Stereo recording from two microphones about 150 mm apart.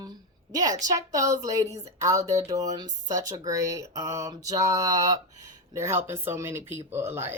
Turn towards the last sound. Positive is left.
turn(degrees=-15)  # may be behind; listen again after turning